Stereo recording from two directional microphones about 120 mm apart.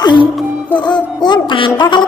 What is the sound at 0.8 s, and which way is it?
A woman's voice, 40° left (ahead or behind).